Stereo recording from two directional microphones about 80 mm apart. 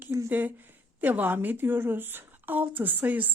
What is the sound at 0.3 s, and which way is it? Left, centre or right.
Speech, right.